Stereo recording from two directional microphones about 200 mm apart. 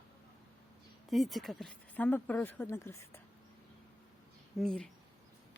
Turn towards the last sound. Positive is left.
turn(degrees=5)  # may be behind; listen again after turning